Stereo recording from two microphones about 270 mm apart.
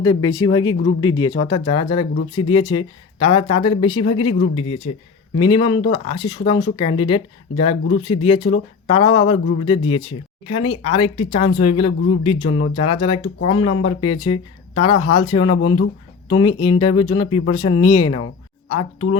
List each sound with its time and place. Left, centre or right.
0.0 s speech: centre